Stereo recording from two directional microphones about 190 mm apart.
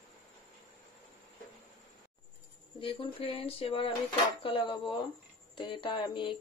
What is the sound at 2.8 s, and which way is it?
Speech, 30° left (ahead or behind).